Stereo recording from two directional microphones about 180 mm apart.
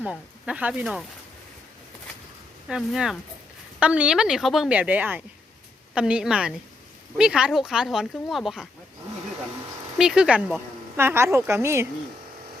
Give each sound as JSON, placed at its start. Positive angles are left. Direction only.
{"t": 0.0, "sound": "speech", "side_deg": -5}
{"t": 2.6, "sound": "speech", "side_deg": -5}
{"t": 10.0, "sound": "speech", "side_deg": -5}